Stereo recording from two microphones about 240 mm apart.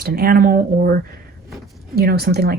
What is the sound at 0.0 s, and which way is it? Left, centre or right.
Speech, right.